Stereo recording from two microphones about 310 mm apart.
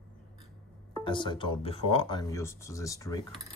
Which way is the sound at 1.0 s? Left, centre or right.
Centre.